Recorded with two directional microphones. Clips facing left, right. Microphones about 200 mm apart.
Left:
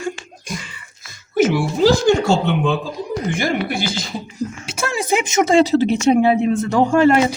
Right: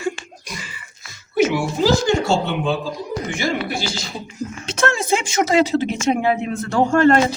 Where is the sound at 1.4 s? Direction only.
50° left (ahead or behind).